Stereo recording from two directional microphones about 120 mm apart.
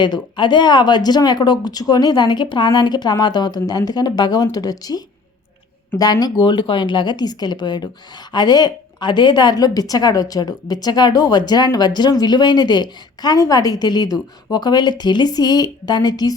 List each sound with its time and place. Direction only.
0.0 s a woman's voice: 40° left (ahead or behind)